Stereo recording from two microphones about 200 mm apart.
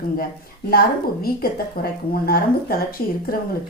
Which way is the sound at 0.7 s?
50° left (ahead or behind).